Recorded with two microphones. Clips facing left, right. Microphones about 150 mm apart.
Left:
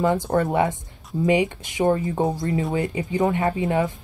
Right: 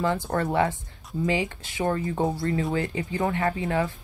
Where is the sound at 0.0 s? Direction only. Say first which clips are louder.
Left 5 dB; 20° left (ahead or behind).